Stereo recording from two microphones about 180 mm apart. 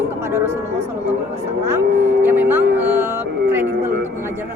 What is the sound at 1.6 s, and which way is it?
Speech, 10° right (ahead or behind).